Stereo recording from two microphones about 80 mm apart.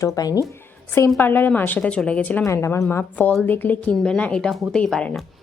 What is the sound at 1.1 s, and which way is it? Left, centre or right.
Speech, left.